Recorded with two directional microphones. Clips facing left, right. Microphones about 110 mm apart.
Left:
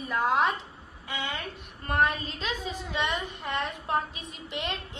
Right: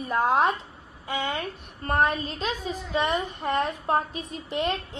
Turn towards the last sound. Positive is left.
turn(degrees=-35)  # may be behind; listen again after turning